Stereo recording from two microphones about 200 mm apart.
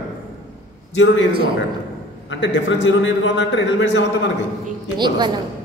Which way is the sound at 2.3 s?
65° left (ahead or behind).